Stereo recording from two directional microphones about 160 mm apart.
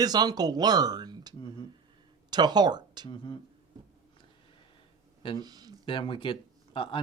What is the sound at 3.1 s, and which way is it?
Speech, 30° left (ahead or behind).